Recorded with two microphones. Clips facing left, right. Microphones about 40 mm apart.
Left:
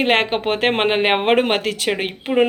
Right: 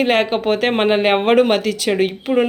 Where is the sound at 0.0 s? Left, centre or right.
Left.